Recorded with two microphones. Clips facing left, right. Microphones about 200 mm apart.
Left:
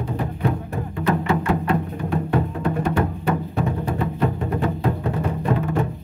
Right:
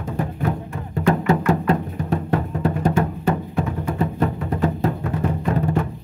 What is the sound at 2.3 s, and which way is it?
Music, 40° right (ahead or behind).